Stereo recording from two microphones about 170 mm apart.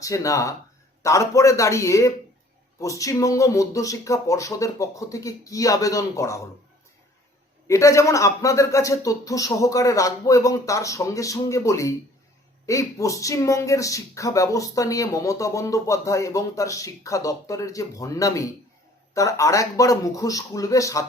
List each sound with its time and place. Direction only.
0.0 s speech: 20° left (ahead or behind)
7.7 s speech: 20° left (ahead or behind)